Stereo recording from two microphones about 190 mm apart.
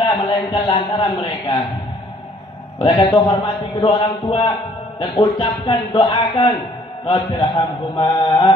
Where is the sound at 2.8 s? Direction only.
25° left (ahead or behind).